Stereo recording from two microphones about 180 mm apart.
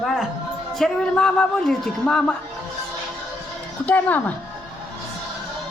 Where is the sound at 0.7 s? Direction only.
5° left (ahead or behind).